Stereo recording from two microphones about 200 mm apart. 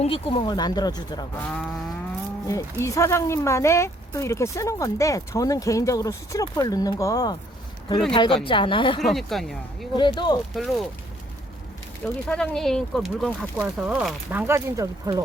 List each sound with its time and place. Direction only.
0.0 s speech: 30° left (ahead or behind)
1.5 s speech: 5° left (ahead or behind); by 9.0 s 25° left (ahead or behind)
9.0 s speech: centre (ahead or behind)
9.9 s speech: 25° left (ahead or behind)
10.5 s speech: centre (ahead or behind)
12.2 s speech: 5° left (ahead or behind); by 15.2 s 15° right (ahead or behind)